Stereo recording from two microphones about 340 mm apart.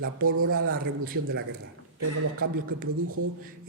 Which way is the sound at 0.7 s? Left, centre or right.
Right.